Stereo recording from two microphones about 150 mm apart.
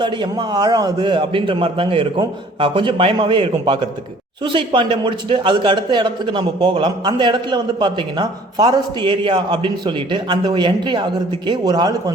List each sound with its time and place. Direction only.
0.0 s a man's voice: 30° right (ahead or behind)